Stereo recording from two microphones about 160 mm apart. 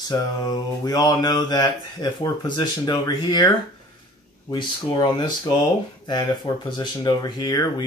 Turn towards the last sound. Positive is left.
turn(degrees=25)  # may be behind; listen again after turning